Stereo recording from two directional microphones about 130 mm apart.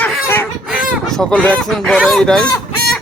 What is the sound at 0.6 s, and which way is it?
Fowl, centre (ahead or behind).